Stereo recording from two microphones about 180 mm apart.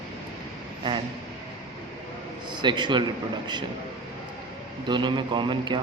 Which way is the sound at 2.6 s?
25° right (ahead or behind).